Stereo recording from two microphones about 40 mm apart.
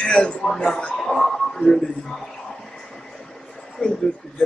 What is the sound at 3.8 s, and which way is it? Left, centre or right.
Speech, centre.